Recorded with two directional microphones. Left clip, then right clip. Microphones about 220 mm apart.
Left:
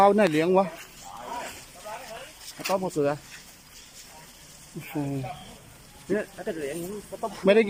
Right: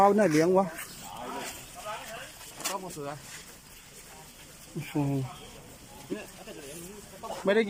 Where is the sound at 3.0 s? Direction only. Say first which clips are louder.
Left 13 dB; 50° left (ahead or behind).